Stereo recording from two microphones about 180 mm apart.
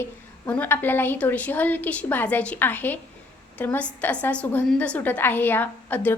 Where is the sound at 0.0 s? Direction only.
10° left (ahead or behind).